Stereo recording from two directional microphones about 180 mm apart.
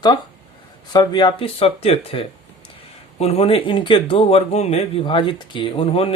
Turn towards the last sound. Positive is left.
turn(degrees=30)  # may be behind; listen again after turning